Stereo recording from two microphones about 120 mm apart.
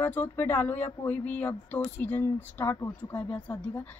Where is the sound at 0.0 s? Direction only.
15° left (ahead or behind).